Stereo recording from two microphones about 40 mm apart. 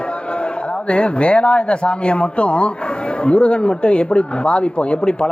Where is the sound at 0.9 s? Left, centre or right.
Left.